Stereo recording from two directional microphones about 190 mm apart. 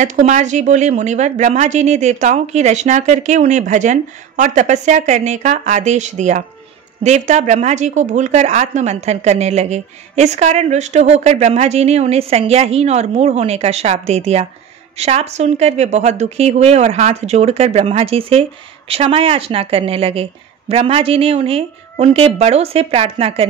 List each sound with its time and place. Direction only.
0.0 s speech: 40° right (ahead or behind)